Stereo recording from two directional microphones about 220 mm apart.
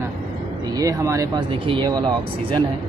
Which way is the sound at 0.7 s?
15° right (ahead or behind).